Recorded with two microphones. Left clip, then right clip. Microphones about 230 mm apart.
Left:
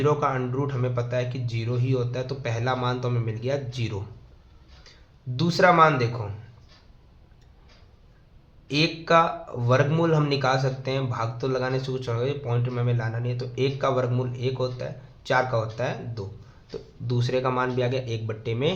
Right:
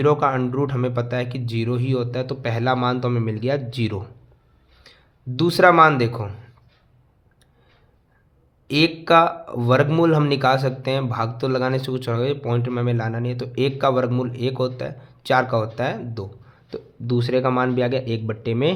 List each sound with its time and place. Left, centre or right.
0.0 s speech: right
5.4 s speech: right
8.6 s speech: right